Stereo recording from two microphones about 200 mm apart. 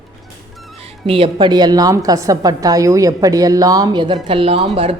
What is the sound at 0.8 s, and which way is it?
A woman's voice, 30° right (ahead or behind).